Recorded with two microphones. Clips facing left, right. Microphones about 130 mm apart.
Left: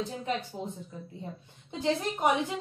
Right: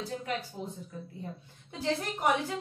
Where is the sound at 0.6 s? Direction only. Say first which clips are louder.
Left 2 dB; 20° left (ahead or behind).